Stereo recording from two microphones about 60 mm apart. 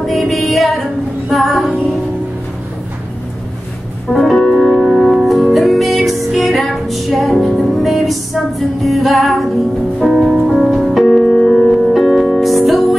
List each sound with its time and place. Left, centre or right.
0.0 s music: centre
4.1 s music: centre